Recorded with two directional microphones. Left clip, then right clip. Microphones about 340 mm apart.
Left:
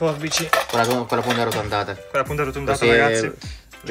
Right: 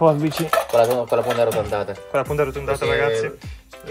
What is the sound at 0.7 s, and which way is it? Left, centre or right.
Speech, left.